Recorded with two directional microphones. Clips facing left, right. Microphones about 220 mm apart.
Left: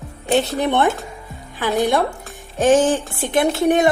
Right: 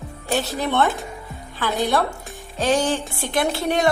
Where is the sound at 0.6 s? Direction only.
15° left (ahead or behind).